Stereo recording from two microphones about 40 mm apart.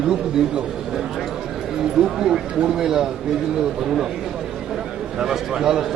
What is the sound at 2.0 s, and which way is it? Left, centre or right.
A man's voice, centre.